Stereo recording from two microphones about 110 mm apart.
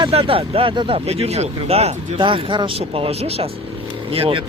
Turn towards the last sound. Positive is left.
turn(degrees=-60)  # may be behind; listen again after turning